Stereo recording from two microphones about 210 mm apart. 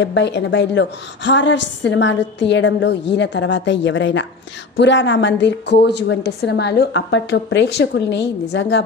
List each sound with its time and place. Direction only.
0.0 s a woman's voice: 55° left (ahead or behind)